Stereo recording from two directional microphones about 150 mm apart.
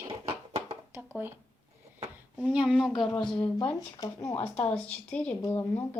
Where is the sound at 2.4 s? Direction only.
5° right (ahead or behind).